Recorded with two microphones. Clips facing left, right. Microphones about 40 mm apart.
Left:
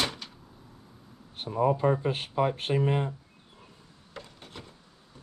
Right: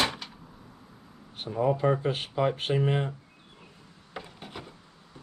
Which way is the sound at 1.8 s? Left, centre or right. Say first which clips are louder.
Even; right.